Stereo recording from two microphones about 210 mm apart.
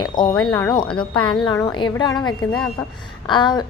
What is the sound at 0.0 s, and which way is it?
A woman's voice, 20° left (ahead or behind).